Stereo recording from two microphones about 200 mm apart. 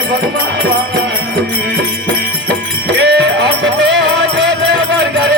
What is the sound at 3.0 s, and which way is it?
Music, 60° right (ahead or behind).